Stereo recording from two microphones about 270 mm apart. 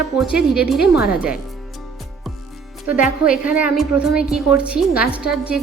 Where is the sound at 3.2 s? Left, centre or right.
Centre.